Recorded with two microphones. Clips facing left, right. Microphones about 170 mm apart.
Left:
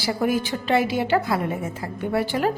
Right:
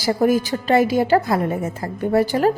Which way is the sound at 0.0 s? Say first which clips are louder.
Right 5 dB; 40° right (ahead or behind).